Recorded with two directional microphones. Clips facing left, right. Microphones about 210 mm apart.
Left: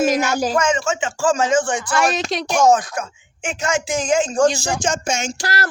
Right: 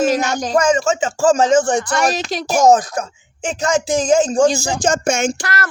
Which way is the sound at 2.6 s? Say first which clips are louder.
Right 3 dB; 40° right (ahead or behind).